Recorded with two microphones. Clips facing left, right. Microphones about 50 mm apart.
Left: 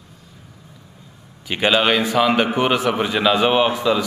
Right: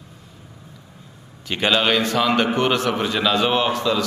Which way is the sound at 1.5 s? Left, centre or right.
Centre.